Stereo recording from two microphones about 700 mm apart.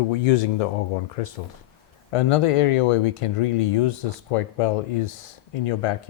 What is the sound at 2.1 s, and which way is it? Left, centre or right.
Speech, left.